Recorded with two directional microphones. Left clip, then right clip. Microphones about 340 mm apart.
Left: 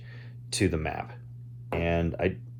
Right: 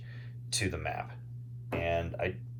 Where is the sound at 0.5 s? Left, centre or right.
Left.